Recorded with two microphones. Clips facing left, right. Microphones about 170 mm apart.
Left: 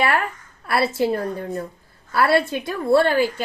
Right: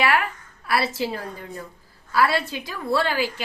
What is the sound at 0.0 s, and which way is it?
A woman's voice, 45° left (ahead or behind).